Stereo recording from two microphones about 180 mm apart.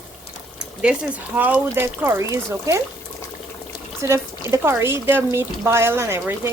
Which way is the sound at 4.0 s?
15° right (ahead or behind).